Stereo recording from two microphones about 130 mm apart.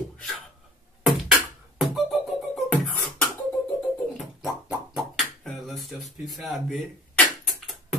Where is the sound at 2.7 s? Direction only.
10° left (ahead or behind).